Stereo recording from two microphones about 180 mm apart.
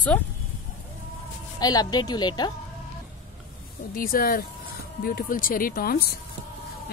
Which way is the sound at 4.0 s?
55° left (ahead or behind).